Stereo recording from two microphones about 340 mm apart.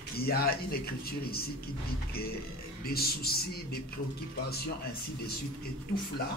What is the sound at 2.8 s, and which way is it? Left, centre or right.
Speech, left.